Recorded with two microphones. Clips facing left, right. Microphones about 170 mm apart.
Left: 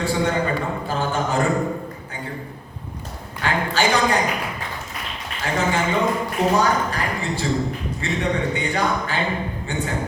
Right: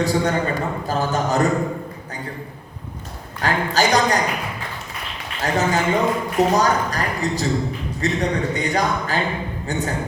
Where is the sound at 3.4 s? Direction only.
40° right (ahead or behind).